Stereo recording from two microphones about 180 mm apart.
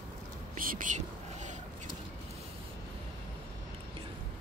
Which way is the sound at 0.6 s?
50° right (ahead or behind).